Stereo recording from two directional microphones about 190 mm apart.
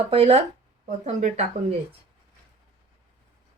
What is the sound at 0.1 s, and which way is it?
Speech, 30° right (ahead or behind).